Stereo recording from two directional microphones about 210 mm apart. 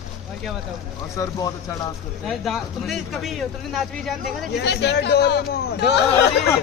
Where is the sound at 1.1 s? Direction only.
15° left (ahead or behind).